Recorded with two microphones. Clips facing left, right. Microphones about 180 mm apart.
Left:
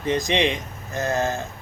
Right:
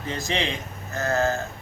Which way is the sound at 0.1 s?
15° left (ahead or behind).